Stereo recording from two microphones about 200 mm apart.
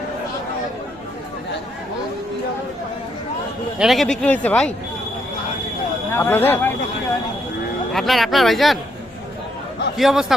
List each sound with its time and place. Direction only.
3.8 s speech: centre (ahead or behind)
6.1 s speech: 10° left (ahead or behind)
7.9 s speech: centre (ahead or behind)
10.0 s speech: centre (ahead or behind)